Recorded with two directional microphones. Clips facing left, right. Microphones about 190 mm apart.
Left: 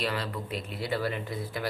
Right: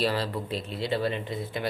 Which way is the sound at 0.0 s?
30° right (ahead or behind).